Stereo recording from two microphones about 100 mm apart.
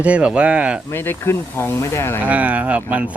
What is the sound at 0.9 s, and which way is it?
Speech, 20° left (ahead or behind).